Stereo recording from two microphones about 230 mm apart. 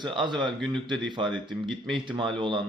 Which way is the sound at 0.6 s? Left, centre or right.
Centre.